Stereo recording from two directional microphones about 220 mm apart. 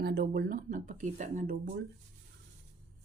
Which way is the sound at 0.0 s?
45° right (ahead or behind).